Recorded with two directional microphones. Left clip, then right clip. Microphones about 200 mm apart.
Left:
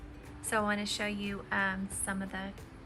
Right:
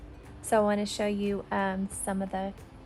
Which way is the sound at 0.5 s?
50° right (ahead or behind).